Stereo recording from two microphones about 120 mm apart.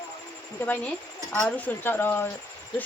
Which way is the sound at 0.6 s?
10° left (ahead or behind).